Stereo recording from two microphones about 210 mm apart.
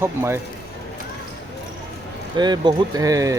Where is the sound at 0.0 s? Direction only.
10° right (ahead or behind).